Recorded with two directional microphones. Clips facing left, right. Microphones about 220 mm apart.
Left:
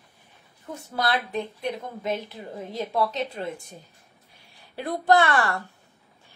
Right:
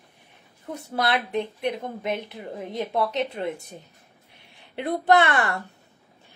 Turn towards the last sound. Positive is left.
turn(degrees=-20)  # may be behind; listen again after turning